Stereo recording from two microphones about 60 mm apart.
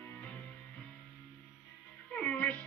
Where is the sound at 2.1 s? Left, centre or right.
Left.